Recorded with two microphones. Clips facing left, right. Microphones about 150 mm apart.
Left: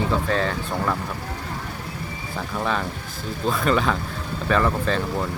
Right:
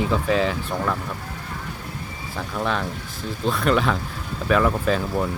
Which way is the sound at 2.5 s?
Centre (ahead or behind).